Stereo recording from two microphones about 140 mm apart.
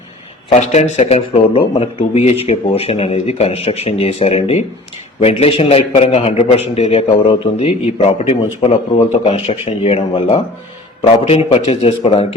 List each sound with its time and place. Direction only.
0.5 s speech: 50° left (ahead or behind)